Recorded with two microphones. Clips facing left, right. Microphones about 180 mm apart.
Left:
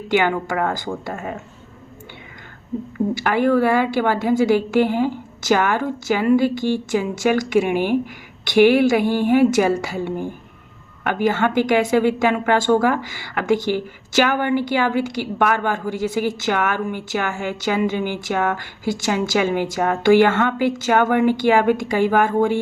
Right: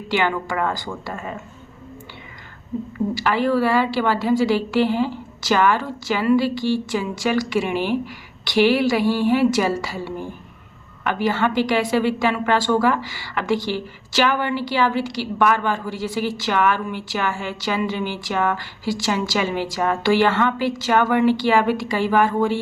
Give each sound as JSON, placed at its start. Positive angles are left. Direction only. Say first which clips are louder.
{"t": 0.1, "sound": "a woman's voice", "louder": "left 3 dB", "side_deg": 50}
{"t": 3.2, "sound": "a woman's voice", "louder": "left 2 dB", "side_deg": 50}